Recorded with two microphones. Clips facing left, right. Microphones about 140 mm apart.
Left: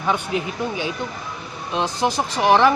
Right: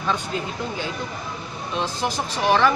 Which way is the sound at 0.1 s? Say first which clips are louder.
Left 4 dB; 15° left (ahead or behind).